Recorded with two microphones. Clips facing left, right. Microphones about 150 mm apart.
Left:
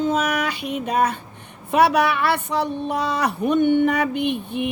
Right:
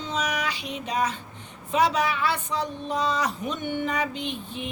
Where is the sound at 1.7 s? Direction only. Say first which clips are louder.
Left 6 dB; 65° left (ahead or behind).